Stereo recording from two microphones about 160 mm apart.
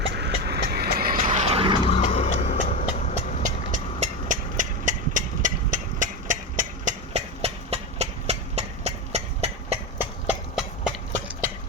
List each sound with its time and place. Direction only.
0.1 s vehicle: 90° right; by 1.8 s 35° right (ahead or behind)
1.9 s vehicle: 35° left (ahead or behind)
3.4 s vehicle: 55° right (ahead or behind)
10.0 s horse: 10° right (ahead or behind)